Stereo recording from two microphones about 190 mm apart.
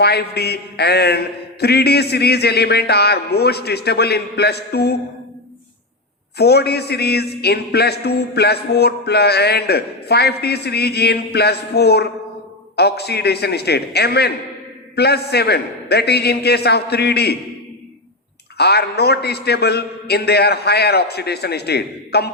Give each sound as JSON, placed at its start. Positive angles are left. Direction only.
{"t": 0.0, "sound": "a man's voice", "side_deg": 60}
{"t": 6.3, "sound": "a man's voice", "side_deg": 60}
{"t": 18.5, "sound": "a man's voice", "side_deg": 60}